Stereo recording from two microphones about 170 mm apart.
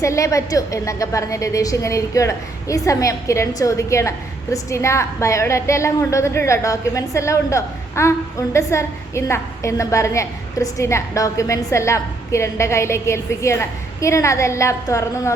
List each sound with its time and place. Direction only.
0.0 s a woman's voice: 20° left (ahead or behind)